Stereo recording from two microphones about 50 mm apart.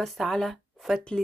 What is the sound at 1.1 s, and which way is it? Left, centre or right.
Speech, centre.